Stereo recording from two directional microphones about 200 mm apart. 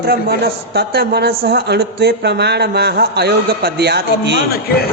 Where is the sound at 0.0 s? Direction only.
50° right (ahead or behind).